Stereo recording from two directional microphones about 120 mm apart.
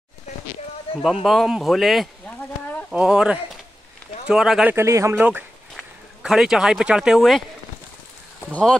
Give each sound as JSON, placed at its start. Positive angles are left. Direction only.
{"t": 0.9, "sound": "a sound", "side_deg": 50}
{"t": 1.2, "sound": "speech", "side_deg": 0}
{"t": 4.7, "sound": "speech", "side_deg": -25}
{"t": 5.1, "sound": "speech", "side_deg": -15}